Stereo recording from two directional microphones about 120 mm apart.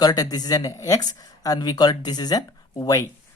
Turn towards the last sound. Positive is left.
turn(degrees=30)  # may be behind; listen again after turning